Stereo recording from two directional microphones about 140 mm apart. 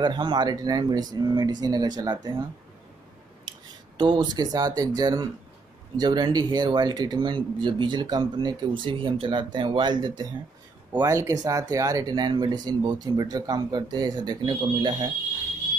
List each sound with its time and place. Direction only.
0.0 s speech: 30° right (ahead or behind)
3.4 s speech: 35° right (ahead or behind)